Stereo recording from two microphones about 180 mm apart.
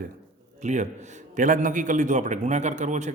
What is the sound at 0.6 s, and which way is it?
A man's voice, 40° right (ahead or behind).